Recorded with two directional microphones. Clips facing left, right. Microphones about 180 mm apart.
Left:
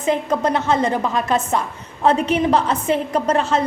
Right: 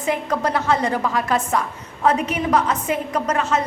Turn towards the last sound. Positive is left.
turn(degrees=30)  # may be behind; listen again after turning